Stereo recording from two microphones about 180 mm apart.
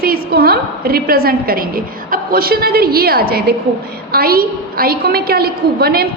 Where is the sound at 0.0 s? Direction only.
55° right (ahead or behind).